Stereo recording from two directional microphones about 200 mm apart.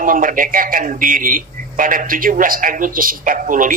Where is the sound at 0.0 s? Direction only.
40° right (ahead or behind).